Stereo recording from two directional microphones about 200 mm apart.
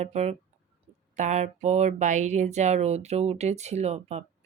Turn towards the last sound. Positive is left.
turn(degrees=-35)  # may be behind; listen again after turning